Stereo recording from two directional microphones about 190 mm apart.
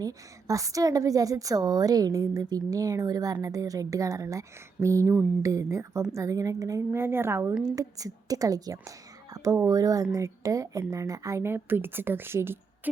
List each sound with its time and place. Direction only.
0.0 s a woman's voice: 20° right (ahead or behind)